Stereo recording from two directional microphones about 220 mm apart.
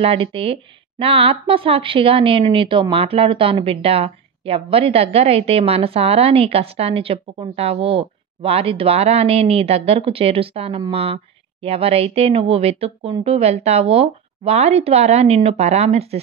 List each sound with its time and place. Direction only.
0.0 s speech: 25° right (ahead or behind)